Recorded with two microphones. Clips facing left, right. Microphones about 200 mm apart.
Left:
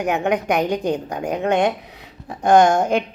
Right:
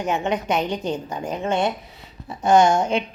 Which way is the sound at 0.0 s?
65° left (ahead or behind).